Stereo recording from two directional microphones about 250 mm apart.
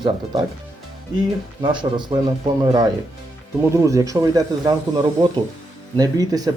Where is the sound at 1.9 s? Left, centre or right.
Centre.